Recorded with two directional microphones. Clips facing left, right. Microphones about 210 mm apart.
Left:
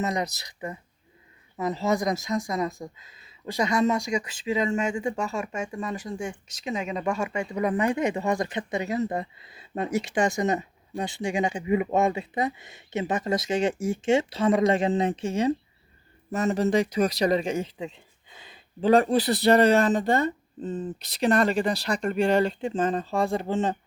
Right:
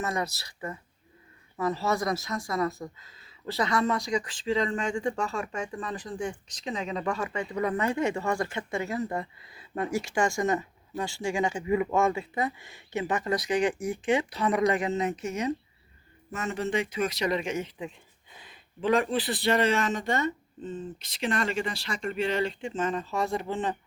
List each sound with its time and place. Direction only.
0.0 s speech: 20° left (ahead or behind)